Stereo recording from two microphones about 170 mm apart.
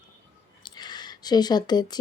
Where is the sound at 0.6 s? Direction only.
25° left (ahead or behind).